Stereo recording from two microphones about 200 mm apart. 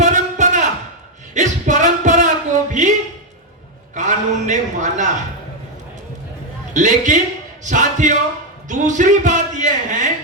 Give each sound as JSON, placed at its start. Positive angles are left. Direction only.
{"t": 0.0, "sound": "a sound", "side_deg": -40}
{"t": 3.9, "sound": "a man's voice", "side_deg": -40}
{"t": 6.7, "sound": "speech", "side_deg": -40}